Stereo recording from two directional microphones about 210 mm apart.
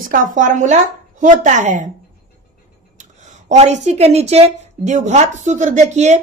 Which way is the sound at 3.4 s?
35° right (ahead or behind).